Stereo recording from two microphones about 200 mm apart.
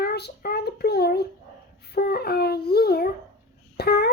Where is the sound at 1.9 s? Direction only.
50° left (ahead or behind).